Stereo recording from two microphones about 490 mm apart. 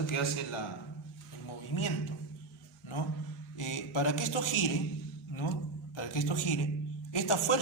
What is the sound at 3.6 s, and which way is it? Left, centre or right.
A man's voice, left.